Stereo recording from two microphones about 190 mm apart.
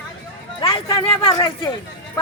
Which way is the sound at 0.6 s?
30° left (ahead or behind).